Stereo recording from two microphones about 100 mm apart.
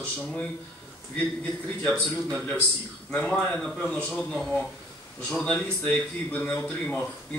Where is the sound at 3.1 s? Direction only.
15° left (ahead or behind).